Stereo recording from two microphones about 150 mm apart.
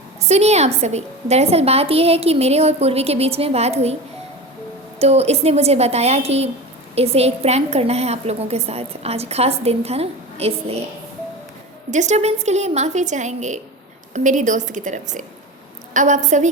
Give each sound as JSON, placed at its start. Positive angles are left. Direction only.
{"t": 0.2, "sound": "a woman's voice", "side_deg": -45}
{"t": 4.9, "sound": "a woman's voice", "side_deg": -45}
{"t": 11.9, "sound": "a woman's voice", "side_deg": -50}